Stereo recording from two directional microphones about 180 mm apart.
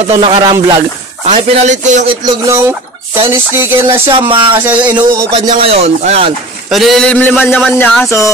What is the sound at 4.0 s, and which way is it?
Speech, 30° right (ahead or behind).